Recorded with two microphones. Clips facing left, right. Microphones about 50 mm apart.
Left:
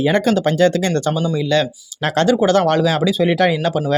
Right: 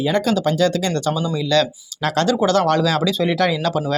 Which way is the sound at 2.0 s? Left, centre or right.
Left.